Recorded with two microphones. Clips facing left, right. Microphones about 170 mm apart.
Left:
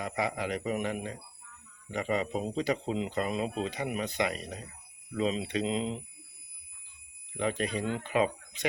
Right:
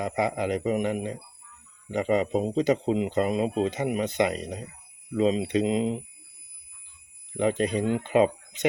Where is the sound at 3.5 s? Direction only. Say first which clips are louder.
Right 8 dB; 40° right (ahead or behind).